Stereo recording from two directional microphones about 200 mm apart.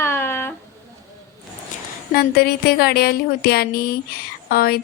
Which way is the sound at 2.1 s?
50° left (ahead or behind).